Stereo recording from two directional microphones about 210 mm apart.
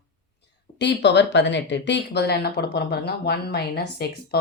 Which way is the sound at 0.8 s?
55° left (ahead or behind).